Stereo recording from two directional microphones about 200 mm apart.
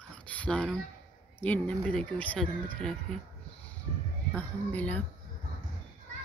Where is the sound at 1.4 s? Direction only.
5° left (ahead or behind).